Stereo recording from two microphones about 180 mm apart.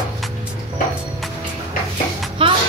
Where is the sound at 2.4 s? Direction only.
30° right (ahead or behind).